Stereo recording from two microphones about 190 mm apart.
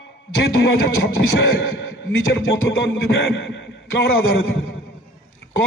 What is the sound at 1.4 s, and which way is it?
Speech, 70° left (ahead or behind).